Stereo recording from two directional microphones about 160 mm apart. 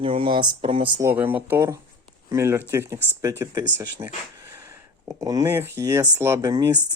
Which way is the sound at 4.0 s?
30° right (ahead or behind).